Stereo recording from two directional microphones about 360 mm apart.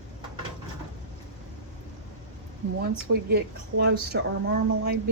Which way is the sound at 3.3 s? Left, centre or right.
Right.